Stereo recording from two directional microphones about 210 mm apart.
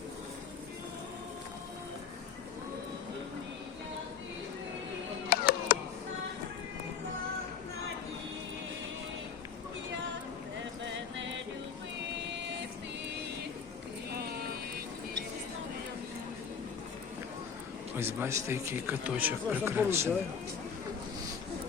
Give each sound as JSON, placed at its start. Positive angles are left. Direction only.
{"t": 5.3, "sound": "music", "side_deg": 45}
{"t": 10.8, "sound": "music", "side_deg": -60}
{"t": 14.2, "sound": "vehicle", "side_deg": -45}
{"t": 17.9, "sound": "speech", "side_deg": -10}